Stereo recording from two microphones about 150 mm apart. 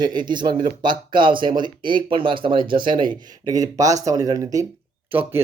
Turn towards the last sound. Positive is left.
turn(degrees=-15)  # may be behind; listen again after turning